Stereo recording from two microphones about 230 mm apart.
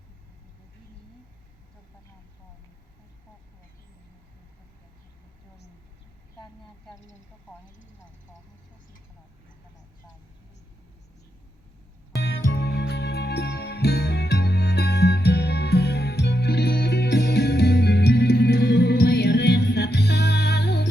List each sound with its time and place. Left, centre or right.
12.2 s music: left